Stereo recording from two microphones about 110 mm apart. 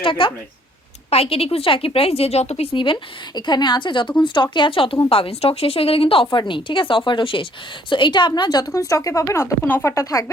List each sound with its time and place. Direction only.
0.0 s speech: 50° left (ahead or behind)
1.1 s a woman's voice: 65° left (ahead or behind)
2.7 s a woman's voice: 50° left (ahead or behind); by 10.3 s 30° left (ahead or behind)